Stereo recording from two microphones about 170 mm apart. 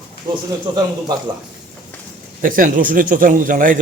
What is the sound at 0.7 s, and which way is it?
Speech, 25° right (ahead or behind).